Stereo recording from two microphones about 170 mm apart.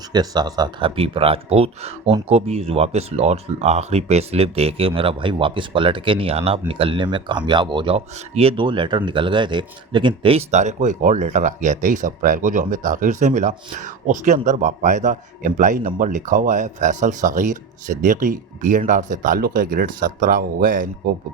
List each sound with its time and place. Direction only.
0.1 s speech: 25° right (ahead or behind); by 20.8 s 55° right (ahead or behind)